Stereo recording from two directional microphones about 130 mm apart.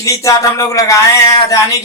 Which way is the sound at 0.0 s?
25° left (ahead or behind).